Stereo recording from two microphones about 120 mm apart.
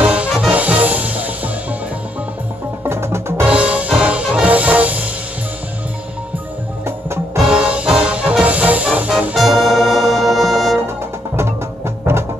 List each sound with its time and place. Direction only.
0.0 s music: 10° right (ahead or behind)
2.8 s music: 20° right (ahead or behind)
3.4 s music: 10° right (ahead or behind)
7.4 s music: 10° right (ahead or behind)
11.3 s music: 20° right (ahead or behind)